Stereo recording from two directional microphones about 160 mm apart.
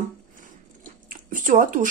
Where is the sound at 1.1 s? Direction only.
60° right (ahead or behind).